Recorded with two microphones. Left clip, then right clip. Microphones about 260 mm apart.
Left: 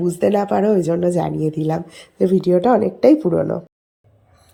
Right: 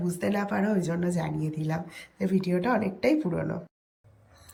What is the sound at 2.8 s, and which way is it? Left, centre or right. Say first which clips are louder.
Speech: left 12 dB; left.